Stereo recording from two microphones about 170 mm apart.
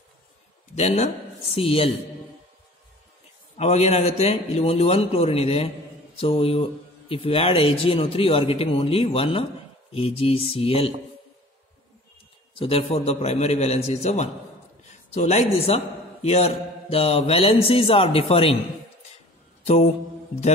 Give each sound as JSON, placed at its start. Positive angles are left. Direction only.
{"t": 0.7, "sound": "a man's voice", "side_deg": 40}
{"t": 3.5, "sound": "a man's voice", "side_deg": 40}
{"t": 12.5, "sound": "a man's voice", "side_deg": 35}
{"t": 19.6, "sound": "mantra", "side_deg": 40}